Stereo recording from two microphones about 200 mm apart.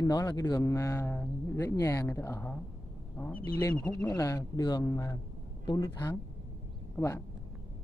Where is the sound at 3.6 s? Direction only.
10° left (ahead or behind).